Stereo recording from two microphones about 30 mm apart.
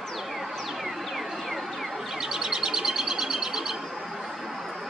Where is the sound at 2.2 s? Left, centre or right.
Centre.